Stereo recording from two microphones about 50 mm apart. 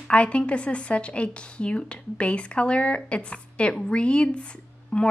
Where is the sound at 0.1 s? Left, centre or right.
Left.